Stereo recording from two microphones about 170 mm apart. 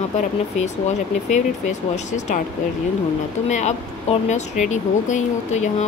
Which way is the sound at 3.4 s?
40° left (ahead or behind).